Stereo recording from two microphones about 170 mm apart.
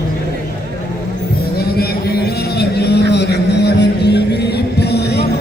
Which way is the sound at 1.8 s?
75° left (ahead or behind).